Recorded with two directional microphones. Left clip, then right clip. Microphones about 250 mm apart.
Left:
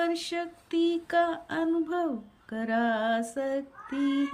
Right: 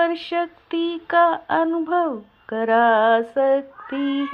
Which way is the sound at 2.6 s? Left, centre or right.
Centre.